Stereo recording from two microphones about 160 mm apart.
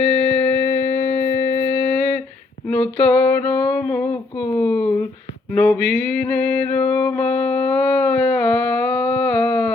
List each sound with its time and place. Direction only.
0.3 s music: 15° left (ahead or behind)
2.6 s a sound: 10° left (ahead or behind)
5.5 s music: 10° left (ahead or behind)